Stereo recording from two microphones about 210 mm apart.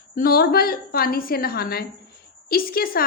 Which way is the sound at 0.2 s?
45° left (ahead or behind).